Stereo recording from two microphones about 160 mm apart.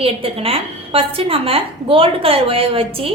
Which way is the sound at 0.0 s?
35° right (ahead or behind).